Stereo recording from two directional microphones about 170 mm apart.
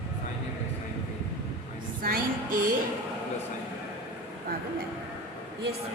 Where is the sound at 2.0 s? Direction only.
55° right (ahead or behind).